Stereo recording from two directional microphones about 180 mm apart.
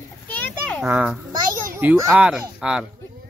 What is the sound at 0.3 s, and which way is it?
Children playing, 5° left (ahead or behind).